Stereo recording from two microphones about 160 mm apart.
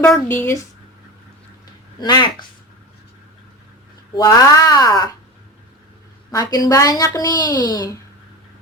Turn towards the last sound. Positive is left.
turn(degrees=25)  # may be behind; listen again after turning